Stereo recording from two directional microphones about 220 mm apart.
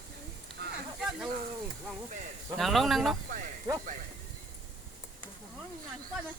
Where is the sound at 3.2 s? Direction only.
35° right (ahead or behind).